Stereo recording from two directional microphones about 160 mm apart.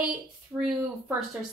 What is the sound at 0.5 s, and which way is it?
Speech, 20° right (ahead or behind).